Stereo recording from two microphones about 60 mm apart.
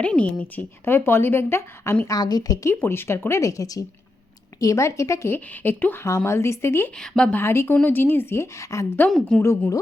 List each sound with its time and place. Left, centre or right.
0.0 s a woman's voice: left
0.9 s speech: left
2.0 s a woman's voice: left
2.6 s a woman's voice: left
3.6 s a woman's voice: left
4.6 s a woman's voice: left
5.3 s speech: left
6.1 s a woman's voice: left
6.9 s a woman's voice: centre
7.4 s a woman's voice: left
9.0 s a woman's voice: centre
9.4 s a woman's voice: left